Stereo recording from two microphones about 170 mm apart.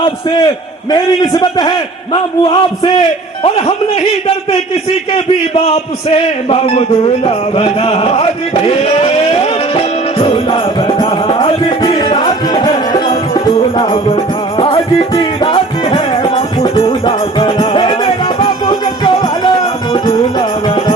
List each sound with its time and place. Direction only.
0.0 s a man's voice: 30° left (ahead or behind)
4.7 s a sound: 35° left (ahead or behind)
14.6 s music: 35° left (ahead or behind)